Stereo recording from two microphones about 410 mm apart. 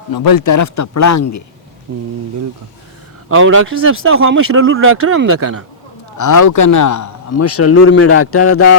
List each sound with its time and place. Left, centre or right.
0.1 s a man's voice: left
1.9 s speech: right
3.2 s speech: right
6.1 s a man's voice: left